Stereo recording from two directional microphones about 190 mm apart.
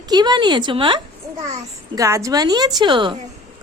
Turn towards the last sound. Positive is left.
turn(degrees=-25)  # may be behind; listen again after turning